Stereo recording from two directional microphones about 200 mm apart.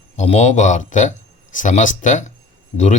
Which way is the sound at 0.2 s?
35° left (ahead or behind).